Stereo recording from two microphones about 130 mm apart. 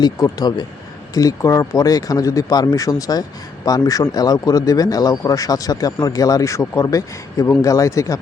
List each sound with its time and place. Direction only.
0.0 s speech: 30° left (ahead or behind)